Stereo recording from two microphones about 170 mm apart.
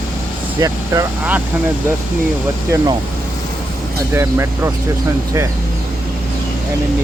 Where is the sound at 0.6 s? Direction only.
15° right (ahead or behind).